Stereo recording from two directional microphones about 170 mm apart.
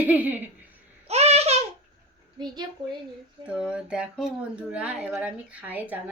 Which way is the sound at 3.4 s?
5° right (ahead or behind).